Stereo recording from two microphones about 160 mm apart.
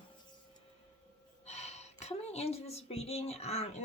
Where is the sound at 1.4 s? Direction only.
45° left (ahead or behind).